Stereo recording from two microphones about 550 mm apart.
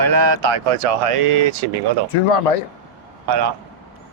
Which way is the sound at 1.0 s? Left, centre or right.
Right.